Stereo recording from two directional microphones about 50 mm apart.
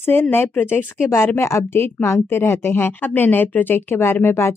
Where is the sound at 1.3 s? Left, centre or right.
Left.